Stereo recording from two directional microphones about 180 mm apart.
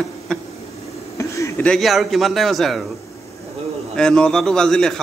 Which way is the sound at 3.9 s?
5° left (ahead or behind).